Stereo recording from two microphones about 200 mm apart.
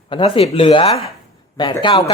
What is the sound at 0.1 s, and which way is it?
Speech, 30° left (ahead or behind).